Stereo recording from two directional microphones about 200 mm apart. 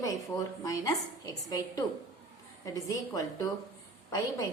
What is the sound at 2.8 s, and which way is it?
Speech, 20° left (ahead or behind).